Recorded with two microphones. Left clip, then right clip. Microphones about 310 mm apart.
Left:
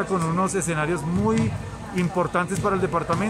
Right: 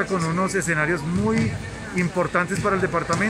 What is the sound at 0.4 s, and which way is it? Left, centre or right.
Speech, centre.